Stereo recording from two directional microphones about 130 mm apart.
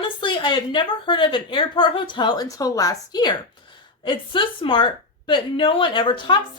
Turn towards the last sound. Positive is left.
turn(degrees=40)  # may be behind; listen again after turning